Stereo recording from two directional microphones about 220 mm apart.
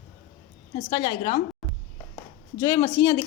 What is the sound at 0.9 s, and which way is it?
Speech, 20° left (ahead or behind).